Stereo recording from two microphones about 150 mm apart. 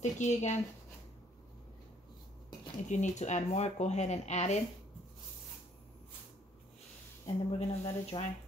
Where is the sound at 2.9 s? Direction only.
55° left (ahead or behind).